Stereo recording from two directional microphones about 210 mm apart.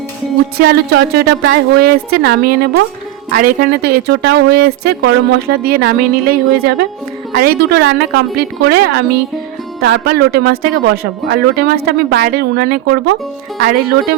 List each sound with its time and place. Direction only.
0.6 s a woman's voice: 50° right (ahead or behind)